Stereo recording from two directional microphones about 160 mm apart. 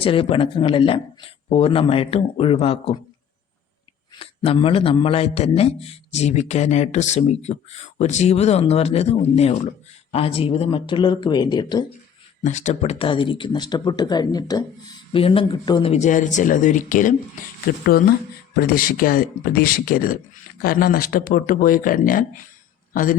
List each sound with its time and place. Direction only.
0.0 s a man's voice: 35° left (ahead or behind)
4.2 s a man's voice: 35° left (ahead or behind)
12.4 s speech: 50° left (ahead or behind); by 14.6 s 25° left (ahead or behind)
15.1 s a man's voice: 35° left (ahead or behind)
15.9 s speech: 50° left (ahead or behind)
17.8 s speech: 70° left (ahead or behind)